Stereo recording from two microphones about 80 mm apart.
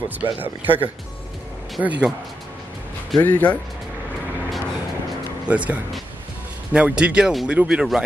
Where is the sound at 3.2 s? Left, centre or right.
Centre.